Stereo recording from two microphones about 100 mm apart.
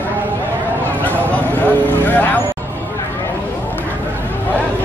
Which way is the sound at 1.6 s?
15° left (ahead or behind).